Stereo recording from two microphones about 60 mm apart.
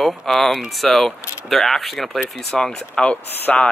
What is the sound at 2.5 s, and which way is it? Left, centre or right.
Speech, centre.